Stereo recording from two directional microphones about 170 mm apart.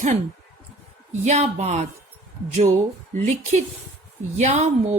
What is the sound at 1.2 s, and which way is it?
Speech, 45° right (ahead or behind).